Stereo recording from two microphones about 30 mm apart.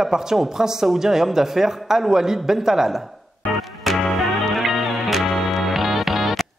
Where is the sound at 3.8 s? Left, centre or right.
Centre.